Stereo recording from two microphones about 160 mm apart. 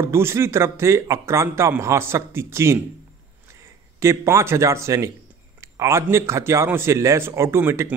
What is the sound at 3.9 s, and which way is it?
A man's voice, 15° right (ahead or behind).